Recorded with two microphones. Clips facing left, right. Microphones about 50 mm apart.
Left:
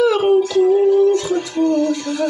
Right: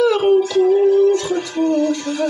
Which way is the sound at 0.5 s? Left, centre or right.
Right.